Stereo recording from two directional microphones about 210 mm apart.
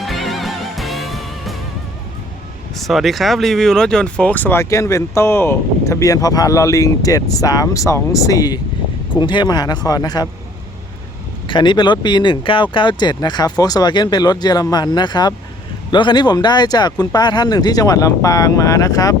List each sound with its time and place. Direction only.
0.0 s music: centre (ahead or behind)
2.7 s speech: centre (ahead or behind); by 10.2 s 20° left (ahead or behind)
11.4 s speech: 20° left (ahead or behind)